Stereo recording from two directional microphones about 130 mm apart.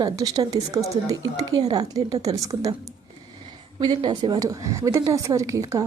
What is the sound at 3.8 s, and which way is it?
A woman's voice, 35° right (ahead or behind).